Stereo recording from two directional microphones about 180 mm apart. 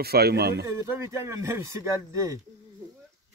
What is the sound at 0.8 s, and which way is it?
Speech, 15° right (ahead or behind).